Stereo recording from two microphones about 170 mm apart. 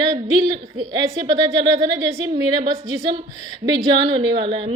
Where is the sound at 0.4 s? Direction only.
25° right (ahead or behind).